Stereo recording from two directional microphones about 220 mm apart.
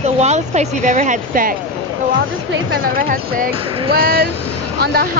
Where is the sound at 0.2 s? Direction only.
30° right (ahead or behind).